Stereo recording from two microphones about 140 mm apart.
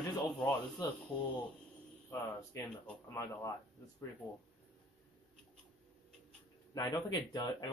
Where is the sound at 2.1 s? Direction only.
20° left (ahead or behind).